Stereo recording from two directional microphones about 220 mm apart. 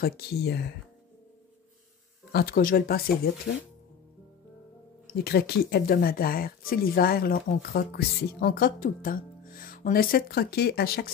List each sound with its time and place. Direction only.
0.0 s speech: 45° left (ahead or behind)
2.3 s speech: 40° left (ahead or behind)
5.0 s speech: 45° left (ahead or behind)